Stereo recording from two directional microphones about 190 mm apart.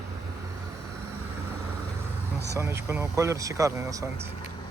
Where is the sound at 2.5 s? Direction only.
15° right (ahead or behind).